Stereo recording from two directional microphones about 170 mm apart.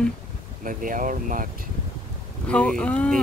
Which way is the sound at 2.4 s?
5° left (ahead or behind).